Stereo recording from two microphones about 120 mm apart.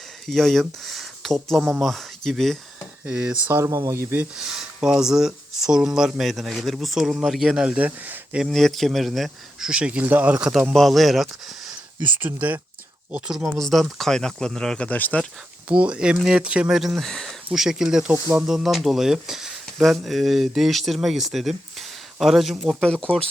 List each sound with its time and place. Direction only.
0.3 s speech: centre (ahead or behind)
0.9 s a sound: centre (ahead or behind)
1.8 s speech: centre (ahead or behind)
3.1 s speech: 10° right (ahead or behind)
3.4 s speech: 20° right (ahead or behind)
4.4 s speech: 5° right (ahead or behind)
8.4 s speech: centre (ahead or behind); by 10.5 s 15° right (ahead or behind)
10.5 s speech: centre (ahead or behind)
12.0 s speech: 15° right (ahead or behind); by 15.3 s 10° left (ahead or behind)
15.7 s speech: 10° right (ahead or behind)